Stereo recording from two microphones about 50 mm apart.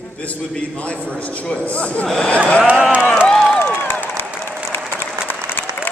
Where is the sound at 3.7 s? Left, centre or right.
Left.